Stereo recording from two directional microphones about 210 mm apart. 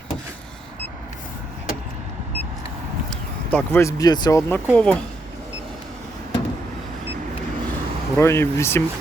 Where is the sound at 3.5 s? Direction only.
10° left (ahead or behind).